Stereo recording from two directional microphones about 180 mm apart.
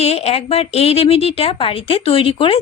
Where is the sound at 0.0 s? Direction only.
35° left (ahead or behind).